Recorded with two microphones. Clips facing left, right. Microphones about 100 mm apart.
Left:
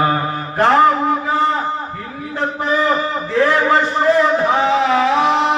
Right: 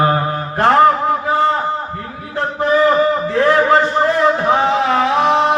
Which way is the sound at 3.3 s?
35° right (ahead or behind).